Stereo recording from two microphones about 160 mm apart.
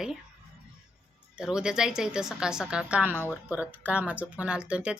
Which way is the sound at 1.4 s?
5° right (ahead or behind).